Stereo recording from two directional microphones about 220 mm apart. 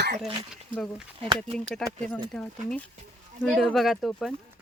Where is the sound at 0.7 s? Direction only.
Centre (ahead or behind).